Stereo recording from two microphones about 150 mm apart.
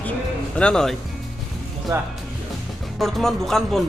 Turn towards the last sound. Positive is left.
turn(degrees=0)  # may be behind; listen again after turning